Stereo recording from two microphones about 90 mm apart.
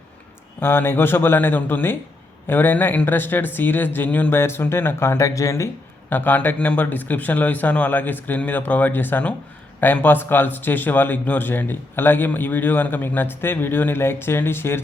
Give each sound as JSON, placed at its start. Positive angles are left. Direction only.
{"t": 0.6, "sound": "a man's voice", "side_deg": 25}
{"t": 6.1, "sound": "a man's voice", "side_deg": 20}